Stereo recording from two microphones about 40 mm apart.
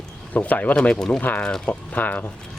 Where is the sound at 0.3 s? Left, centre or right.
Left.